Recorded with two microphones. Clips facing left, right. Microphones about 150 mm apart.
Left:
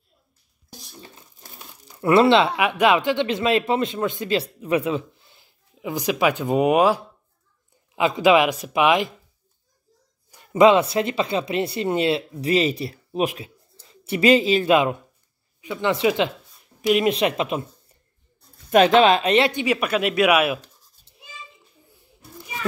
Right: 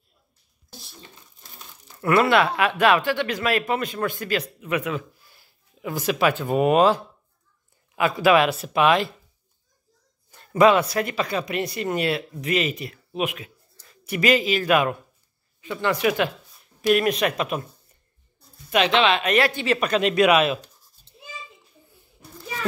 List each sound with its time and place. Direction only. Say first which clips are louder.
0.7 s a sound: left 2 dB; 45° left (ahead or behind)
2.0 s speech: left 3 dB; 25° left (ahead or behind)
10.3 s speech: left 2 dB; 15° left (ahead or behind)
18.7 s speech: left 5 dB; 45° left (ahead or behind); by 20.6 s 10° left (ahead or behind)